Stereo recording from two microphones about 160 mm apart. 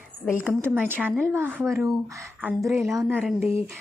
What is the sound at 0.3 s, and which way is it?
A woman's voice, 10° right (ahead or behind).